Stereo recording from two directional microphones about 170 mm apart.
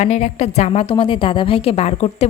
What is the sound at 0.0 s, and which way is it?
A woman's voice, 45° left (ahead or behind).